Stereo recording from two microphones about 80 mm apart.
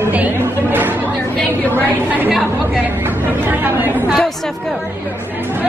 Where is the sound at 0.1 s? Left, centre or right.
Right.